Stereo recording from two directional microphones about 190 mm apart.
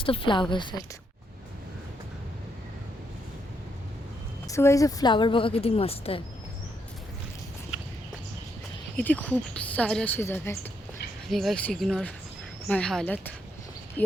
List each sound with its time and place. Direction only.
0.0 s a woman's voice: 25° left (ahead or behind)
4.4 s a woman's voice: 15° left (ahead or behind)
9.0 s speech: 10° left (ahead or behind)
11.3 s speech: centre (ahead or behind)